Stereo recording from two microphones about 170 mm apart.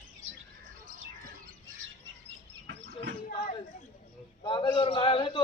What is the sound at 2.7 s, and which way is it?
Chicken, 90° right.